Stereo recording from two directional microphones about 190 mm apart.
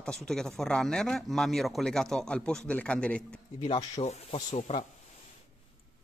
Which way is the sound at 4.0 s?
35° left (ahead or behind).